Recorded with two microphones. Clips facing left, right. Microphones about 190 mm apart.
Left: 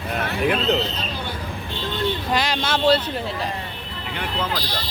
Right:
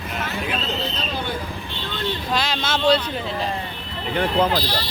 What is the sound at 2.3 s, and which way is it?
Speech, 15° left (ahead or behind).